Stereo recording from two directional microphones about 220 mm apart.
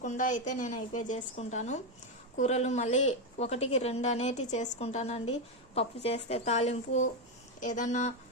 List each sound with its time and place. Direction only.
0.0 s a woman's voice: 35° left (ahead or behind)